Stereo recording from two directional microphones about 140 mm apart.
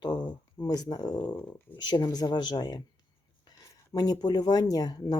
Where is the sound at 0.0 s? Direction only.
30° left (ahead or behind).